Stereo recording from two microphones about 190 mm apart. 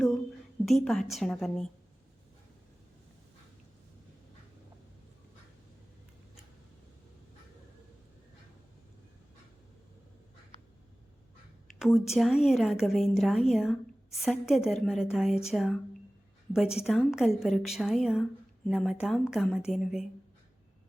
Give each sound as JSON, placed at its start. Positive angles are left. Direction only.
{"t": 0.6, "sound": "a woman's voice", "side_deg": 0}
{"t": 11.7, "sound": "a woman's voice", "side_deg": 0}